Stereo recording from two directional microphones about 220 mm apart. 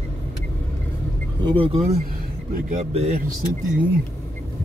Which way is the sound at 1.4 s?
25° right (ahead or behind).